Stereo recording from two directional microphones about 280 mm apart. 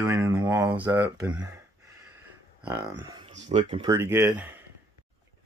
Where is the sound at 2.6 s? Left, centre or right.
Centre.